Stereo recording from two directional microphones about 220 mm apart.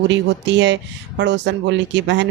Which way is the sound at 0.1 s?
55° right (ahead or behind).